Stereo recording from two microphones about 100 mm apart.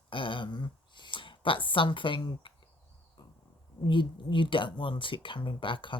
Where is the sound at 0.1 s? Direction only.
55° left (ahead or behind).